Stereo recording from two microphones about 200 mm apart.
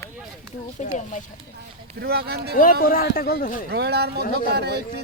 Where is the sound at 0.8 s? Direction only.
40° left (ahead or behind).